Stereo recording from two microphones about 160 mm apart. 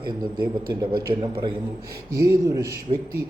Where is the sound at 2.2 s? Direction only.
20° right (ahead or behind).